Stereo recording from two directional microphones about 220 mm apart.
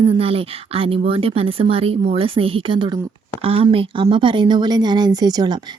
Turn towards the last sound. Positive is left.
turn(degrees=-20)  # may be behind; listen again after turning